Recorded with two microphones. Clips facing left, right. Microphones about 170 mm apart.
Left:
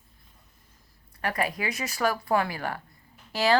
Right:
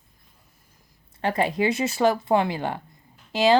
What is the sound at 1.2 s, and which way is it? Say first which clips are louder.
Speech: right 6 dB; 25° right (ahead or behind).